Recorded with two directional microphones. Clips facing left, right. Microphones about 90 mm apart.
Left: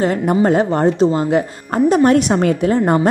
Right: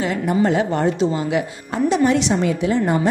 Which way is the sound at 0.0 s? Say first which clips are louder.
Left 4 dB; 45° left (ahead or behind).